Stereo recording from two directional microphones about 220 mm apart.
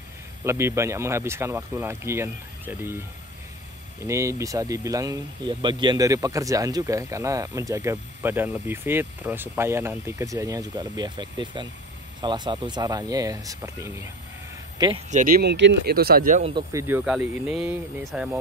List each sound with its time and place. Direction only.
0.4 s speech: 10° right (ahead or behind)
4.1 s speech: 15° right (ahead or behind)
15.0 s speech: 35° right (ahead or behind)
16.5 s speech: 10° right (ahead or behind)